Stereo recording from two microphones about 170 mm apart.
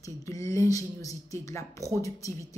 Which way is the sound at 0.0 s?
20° left (ahead or behind).